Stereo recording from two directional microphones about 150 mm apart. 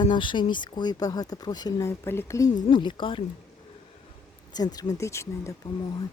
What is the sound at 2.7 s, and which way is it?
Speech, 35° left (ahead or behind).